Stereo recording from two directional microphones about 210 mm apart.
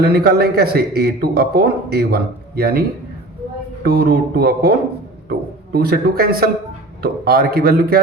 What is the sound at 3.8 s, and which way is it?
A man's voice, 50° right (ahead or behind).